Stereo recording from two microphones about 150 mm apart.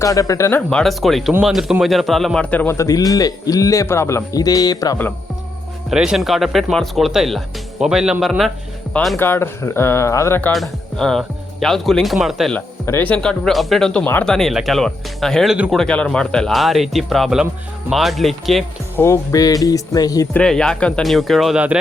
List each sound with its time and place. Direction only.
0.0 s a man's voice: 20° left (ahead or behind)
0.7 s a man's voice: 5° left (ahead or behind); by 4.9 s 25° left (ahead or behind)
5.9 s speech: 5° right (ahead or behind)
9.1 s speech: 15° left (ahead or behind)
10.5 s speech: centre (ahead or behind)
12.5 s speech: 15° left (ahead or behind)
15.5 s speech: 10° right (ahead or behind)
15.8 s speech: 5° left (ahead or behind)
18.9 s a man's voice: 20° left (ahead or behind)
20.3 s speech: 5° left (ahead or behind)